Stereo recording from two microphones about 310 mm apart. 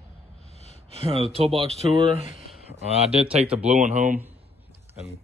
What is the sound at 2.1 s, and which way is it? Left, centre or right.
Speech, left.